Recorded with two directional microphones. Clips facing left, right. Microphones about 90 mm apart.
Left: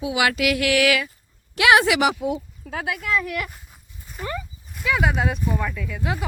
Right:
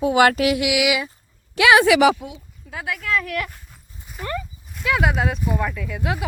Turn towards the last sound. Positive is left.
turn(degrees=-5)  # may be behind; listen again after turning